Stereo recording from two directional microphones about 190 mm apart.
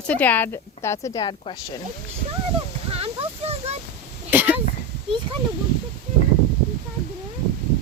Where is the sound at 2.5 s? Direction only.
30° right (ahead or behind).